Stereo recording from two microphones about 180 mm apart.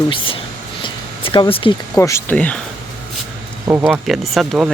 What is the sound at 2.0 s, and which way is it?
Speech, 15° left (ahead or behind).